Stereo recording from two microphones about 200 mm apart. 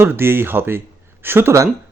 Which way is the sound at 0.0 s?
10° right (ahead or behind).